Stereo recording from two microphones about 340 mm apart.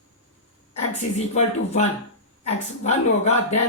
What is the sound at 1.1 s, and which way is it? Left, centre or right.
A woman's voice, centre.